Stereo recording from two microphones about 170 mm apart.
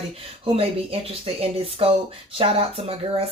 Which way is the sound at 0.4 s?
35° right (ahead or behind).